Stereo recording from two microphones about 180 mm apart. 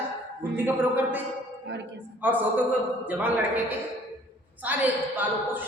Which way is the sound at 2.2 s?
10° right (ahead or behind).